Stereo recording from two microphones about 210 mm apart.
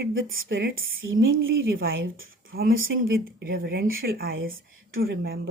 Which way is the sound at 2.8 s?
70° right (ahead or behind).